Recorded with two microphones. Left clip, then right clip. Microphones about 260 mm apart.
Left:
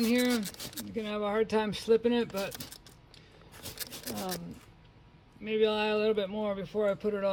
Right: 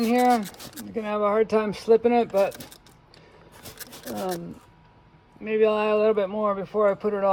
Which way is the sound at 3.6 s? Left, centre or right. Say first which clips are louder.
Even; centre.